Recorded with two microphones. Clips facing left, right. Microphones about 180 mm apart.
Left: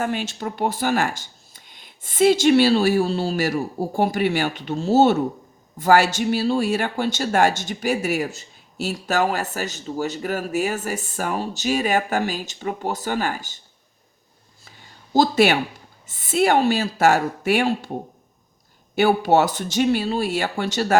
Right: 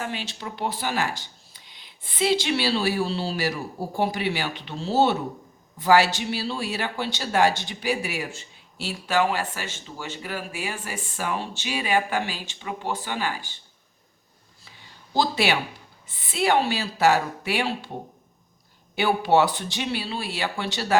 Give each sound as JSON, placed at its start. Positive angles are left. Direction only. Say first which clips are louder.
{"t": 0.0, "sound": "speech", "louder": "left 7 dB", "side_deg": 50}
{"t": 14.6, "sound": "a sound", "louder": "left 2 dB", "side_deg": 45}
{"t": 16.0, "sound": "speech", "louder": "left 5 dB", "side_deg": 45}
{"t": 18.9, "sound": "speech", "louder": "left 3 dB", "side_deg": 45}